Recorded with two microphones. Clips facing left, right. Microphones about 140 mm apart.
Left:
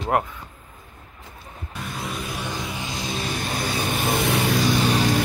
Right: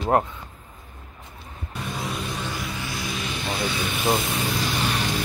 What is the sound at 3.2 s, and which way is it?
Vehicle, 45° left (ahead or behind).